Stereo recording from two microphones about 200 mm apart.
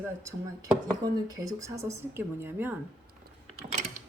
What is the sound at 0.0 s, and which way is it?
Speech, 15° right (ahead or behind).